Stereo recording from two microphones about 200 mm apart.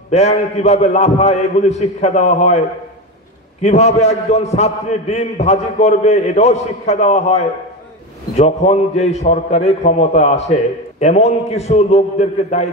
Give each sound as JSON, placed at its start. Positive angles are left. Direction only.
{"t": 0.1, "sound": "a man's voice", "side_deg": 35}
{"t": 3.6, "sound": "a man's voice", "side_deg": 35}